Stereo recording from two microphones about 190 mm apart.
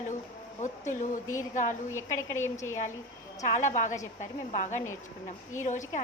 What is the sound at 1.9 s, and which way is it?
Speech, 15° left (ahead or behind).